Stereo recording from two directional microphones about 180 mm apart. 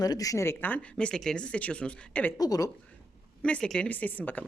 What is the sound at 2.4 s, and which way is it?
Speech, 20° left (ahead or behind).